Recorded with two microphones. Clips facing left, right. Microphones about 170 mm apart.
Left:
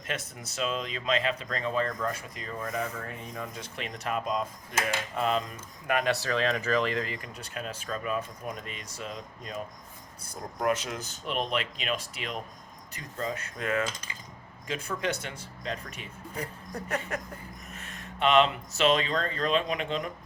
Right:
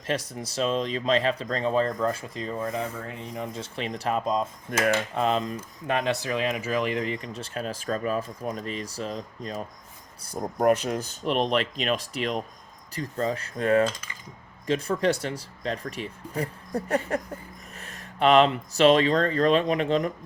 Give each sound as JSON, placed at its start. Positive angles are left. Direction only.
{"t": 0.1, "sound": "speech", "side_deg": -35}
{"t": 7.5, "sound": "speech", "side_deg": -35}